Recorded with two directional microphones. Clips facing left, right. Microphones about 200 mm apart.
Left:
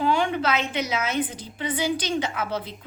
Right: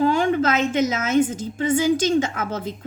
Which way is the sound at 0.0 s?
45° right (ahead or behind).